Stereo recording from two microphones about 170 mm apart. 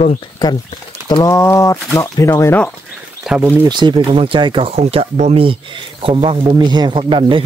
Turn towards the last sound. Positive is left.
turn(degrees=-30)  # may be behind; listen again after turning